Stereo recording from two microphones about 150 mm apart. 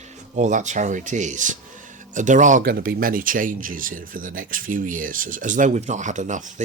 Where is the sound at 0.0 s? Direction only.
50° right (ahead or behind).